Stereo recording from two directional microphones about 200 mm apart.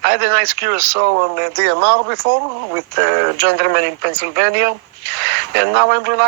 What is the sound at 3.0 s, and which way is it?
A man's voice, 55° right (ahead or behind).